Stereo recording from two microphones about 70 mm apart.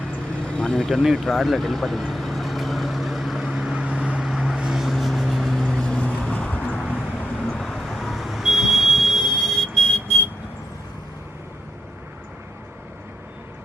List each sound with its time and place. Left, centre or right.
0.4 s vehicle: centre
7.6 s vehicle: centre